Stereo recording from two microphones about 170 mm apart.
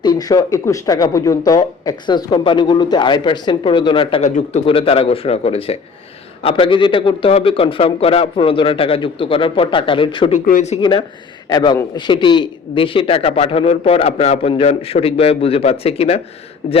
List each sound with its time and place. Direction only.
0.0 s a man's voice: 25° left (ahead or behind)
10.3 s speech: 50° left (ahead or behind)
10.8 s a man's voice: 25° left (ahead or behind)